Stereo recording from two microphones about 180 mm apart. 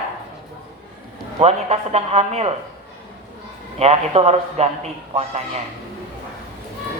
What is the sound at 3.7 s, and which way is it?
Speech, 35° right (ahead or behind).